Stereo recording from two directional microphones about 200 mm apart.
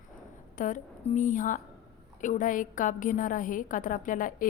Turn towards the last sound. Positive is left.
turn(degrees=40)  # may be behind; listen again after turning